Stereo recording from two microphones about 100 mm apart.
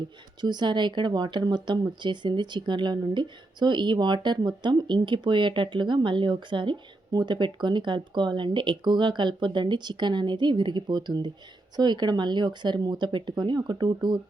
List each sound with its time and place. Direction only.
0.4 s speech: 50° right (ahead or behind)